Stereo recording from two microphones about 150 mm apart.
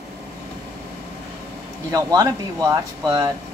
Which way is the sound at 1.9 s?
25° right (ahead or behind).